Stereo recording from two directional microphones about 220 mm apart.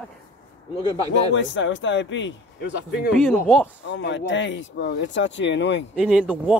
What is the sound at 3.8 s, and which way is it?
Speech, 55° left (ahead or behind).